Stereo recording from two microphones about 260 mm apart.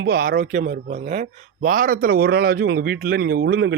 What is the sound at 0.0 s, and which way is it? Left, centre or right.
Speech, right.